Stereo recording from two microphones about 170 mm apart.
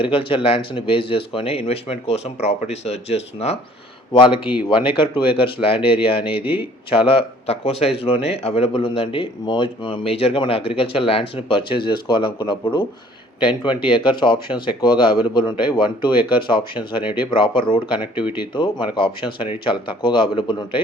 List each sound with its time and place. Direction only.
0.0 s speech: 30° left (ahead or behind)
18.0 s speech: 10° right (ahead or behind)
18.3 s speech: 30° left (ahead or behind)